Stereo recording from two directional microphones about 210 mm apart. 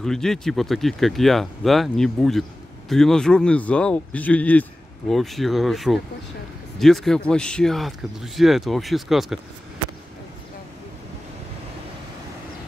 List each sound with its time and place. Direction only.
0.0 s speech: centre (ahead or behind)